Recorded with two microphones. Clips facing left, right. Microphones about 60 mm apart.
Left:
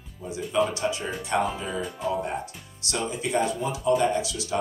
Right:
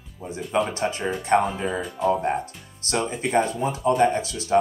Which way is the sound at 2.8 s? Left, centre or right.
Right.